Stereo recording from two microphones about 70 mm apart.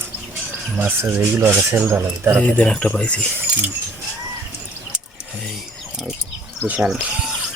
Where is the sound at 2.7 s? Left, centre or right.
Centre.